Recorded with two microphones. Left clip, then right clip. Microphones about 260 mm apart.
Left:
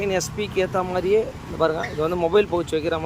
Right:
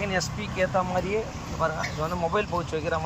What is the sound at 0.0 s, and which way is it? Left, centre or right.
Speech, centre.